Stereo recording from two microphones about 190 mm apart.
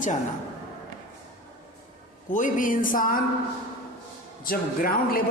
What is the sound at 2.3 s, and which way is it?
Speech, 45° left (ahead or behind).